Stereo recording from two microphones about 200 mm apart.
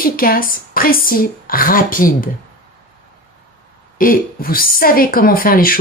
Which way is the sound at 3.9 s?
45° left (ahead or behind).